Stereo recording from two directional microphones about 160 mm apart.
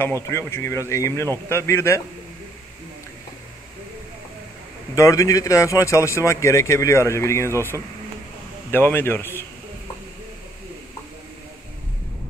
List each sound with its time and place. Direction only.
0.0 s speech: 15° left (ahead or behind)
4.9 s speech: 20° left (ahead or behind)